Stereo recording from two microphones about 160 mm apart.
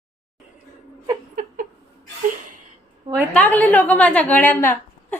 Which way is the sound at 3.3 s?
10° left (ahead or behind).